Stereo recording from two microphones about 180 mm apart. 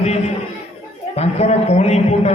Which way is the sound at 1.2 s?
35° left (ahead or behind).